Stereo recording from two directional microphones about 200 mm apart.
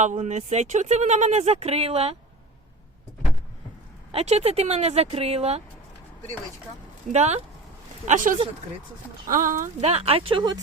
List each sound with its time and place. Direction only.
0.0 s speech: 35° right (ahead or behind)
4.1 s speech: 30° right (ahead or behind)
7.1 s speech: 35° right (ahead or behind)